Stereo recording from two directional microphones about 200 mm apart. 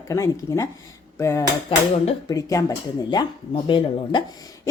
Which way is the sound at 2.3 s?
15° left (ahead or behind).